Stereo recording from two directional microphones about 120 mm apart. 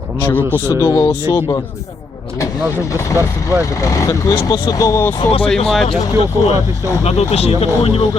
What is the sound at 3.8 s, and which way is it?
Speech, 25° left (ahead or behind).